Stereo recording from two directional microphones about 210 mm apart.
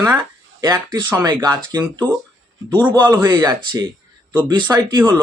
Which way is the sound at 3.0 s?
10° right (ahead or behind).